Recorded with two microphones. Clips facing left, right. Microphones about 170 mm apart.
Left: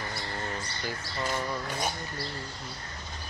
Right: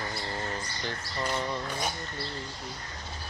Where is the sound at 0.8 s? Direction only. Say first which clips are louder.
Even; 5° left (ahead or behind).